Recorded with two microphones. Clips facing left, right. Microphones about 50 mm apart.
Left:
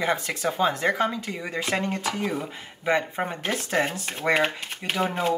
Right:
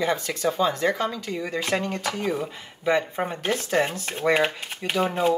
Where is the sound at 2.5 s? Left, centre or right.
Centre.